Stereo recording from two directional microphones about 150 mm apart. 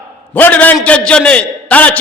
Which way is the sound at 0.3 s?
10° left (ahead or behind).